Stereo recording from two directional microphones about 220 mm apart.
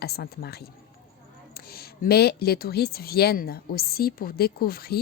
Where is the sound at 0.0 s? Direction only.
45° left (ahead or behind).